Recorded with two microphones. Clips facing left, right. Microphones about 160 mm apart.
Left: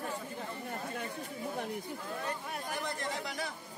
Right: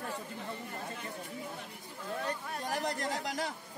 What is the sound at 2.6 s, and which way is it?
Speech, 40° right (ahead or behind).